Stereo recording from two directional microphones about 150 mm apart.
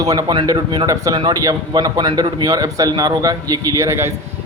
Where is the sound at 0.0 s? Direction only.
25° right (ahead or behind).